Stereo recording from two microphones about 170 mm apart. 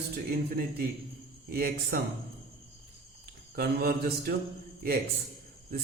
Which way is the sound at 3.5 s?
60° right (ahead or behind).